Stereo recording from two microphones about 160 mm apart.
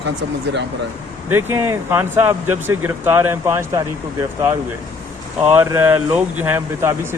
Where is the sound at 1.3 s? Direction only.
15° right (ahead or behind).